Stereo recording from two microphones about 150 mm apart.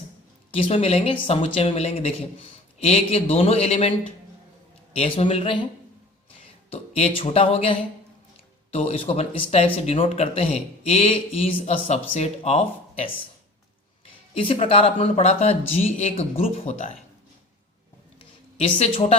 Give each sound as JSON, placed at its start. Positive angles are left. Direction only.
{"t": 0.5, "sound": "speech", "side_deg": 40}
{"t": 4.9, "sound": "speech", "side_deg": 35}
{"t": 6.7, "sound": "speech", "side_deg": 40}
{"t": 14.3, "sound": "speech", "side_deg": 40}
{"t": 18.5, "sound": "speech", "side_deg": 40}